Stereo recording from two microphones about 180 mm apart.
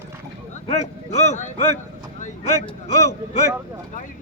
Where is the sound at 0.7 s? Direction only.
40° left (ahead or behind).